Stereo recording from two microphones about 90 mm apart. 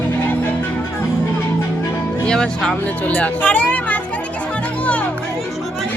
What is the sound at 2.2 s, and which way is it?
Speech, 10° left (ahead or behind).